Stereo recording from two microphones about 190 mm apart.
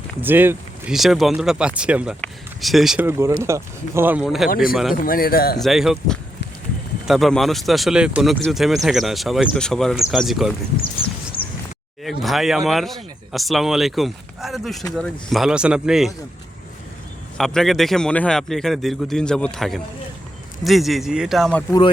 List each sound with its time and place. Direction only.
0.2 s speech: 10° right (ahead or behind)
4.4 s speech: 50° left (ahead or behind)
4.7 s speech: centre (ahead or behind)
4.9 s speech: 50° left (ahead or behind)
5.5 s speech: centre (ahead or behind)
11.3 s a sound: 10° left (ahead or behind)
12.0 s speech: centre (ahead or behind)
17.3 s speech: centre (ahead or behind)
21.7 s speech: 25° left (ahead or behind)